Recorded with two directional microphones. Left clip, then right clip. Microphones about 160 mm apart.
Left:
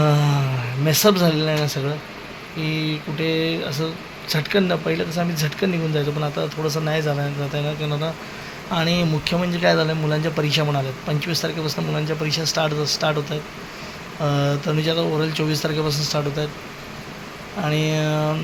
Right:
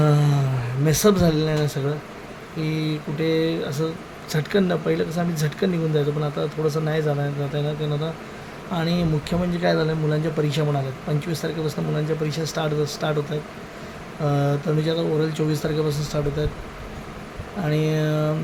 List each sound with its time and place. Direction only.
0.0 s a sound: 15° right (ahead or behind)
0.9 s speech: 15° right (ahead or behind)
8.7 s speech: 10° right (ahead or behind)
14.3 s speech: 15° right (ahead or behind)
17.6 s speech: 15° right (ahead or behind)